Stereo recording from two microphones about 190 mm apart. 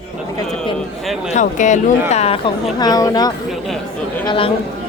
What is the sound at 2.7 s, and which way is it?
A woman's voice, 20° left (ahead or behind).